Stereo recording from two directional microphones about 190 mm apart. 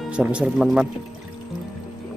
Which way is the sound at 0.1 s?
5° right (ahead or behind).